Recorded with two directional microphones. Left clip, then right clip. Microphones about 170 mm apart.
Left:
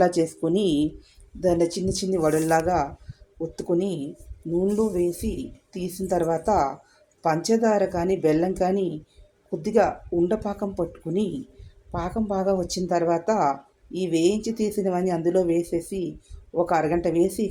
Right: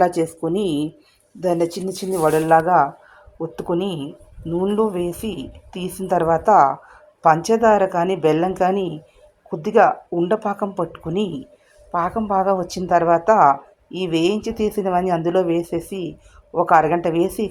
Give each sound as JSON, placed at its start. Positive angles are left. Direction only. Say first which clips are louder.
{"t": 0.0, "sound": "a woman's voice", "louder": "right 3 dB", "side_deg": 0}